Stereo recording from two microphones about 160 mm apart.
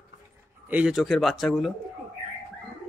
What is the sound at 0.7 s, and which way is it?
A man's voice, 5° right (ahead or behind).